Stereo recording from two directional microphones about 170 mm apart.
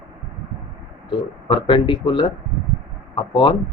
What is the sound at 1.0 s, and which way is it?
Speech, 30° left (ahead or behind).